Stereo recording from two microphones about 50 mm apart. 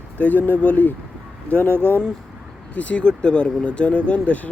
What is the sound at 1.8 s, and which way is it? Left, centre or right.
Speech, right.